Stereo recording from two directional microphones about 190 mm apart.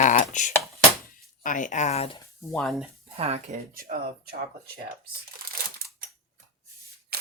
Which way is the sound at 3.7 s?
45° right (ahead or behind).